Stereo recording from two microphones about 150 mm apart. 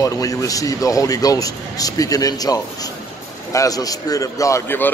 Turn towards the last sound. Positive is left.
turn(degrees=15)  # may be behind; listen again after turning